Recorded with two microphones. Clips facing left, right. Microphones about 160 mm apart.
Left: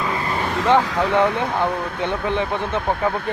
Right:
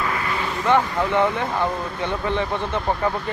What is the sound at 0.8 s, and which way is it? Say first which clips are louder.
Speech: left 2 dB; 90° left.